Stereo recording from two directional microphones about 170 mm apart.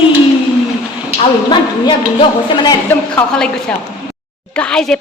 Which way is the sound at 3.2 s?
5° left (ahead or behind).